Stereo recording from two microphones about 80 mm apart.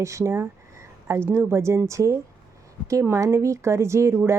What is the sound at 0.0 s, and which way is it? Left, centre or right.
Speech, right.